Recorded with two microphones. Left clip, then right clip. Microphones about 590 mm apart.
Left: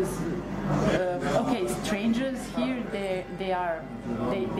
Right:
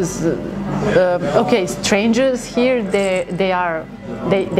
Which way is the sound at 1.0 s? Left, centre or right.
Right.